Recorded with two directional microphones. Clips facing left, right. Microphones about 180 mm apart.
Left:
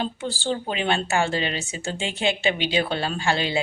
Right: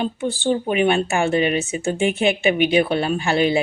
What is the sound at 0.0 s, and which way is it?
Speech, 20° right (ahead or behind).